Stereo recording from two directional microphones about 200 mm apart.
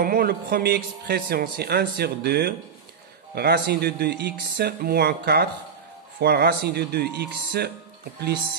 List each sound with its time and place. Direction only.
0.0 s a man's voice: 50° right (ahead or behind)